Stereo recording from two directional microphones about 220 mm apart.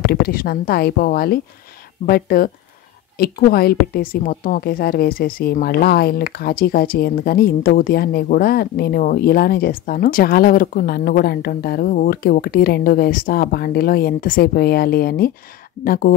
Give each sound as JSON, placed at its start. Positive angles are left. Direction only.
{"t": 0.0, "sound": "a woman's voice", "side_deg": 45}